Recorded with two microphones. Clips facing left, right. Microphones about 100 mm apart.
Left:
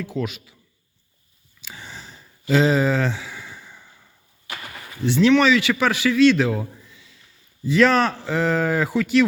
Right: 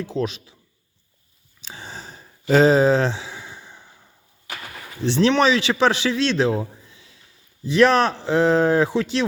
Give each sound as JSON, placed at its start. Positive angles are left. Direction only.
{"t": 0.0, "sound": "a man's voice", "side_deg": -25}
{"t": 1.6, "sound": "a sound", "side_deg": -30}
{"t": 5.0, "sound": "a man's voice", "side_deg": -25}